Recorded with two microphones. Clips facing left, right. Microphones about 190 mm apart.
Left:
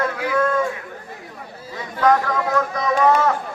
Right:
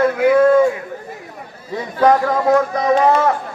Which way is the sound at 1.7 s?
30° right (ahead or behind).